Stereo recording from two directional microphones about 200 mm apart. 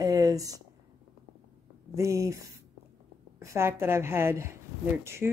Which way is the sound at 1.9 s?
15° right (ahead or behind).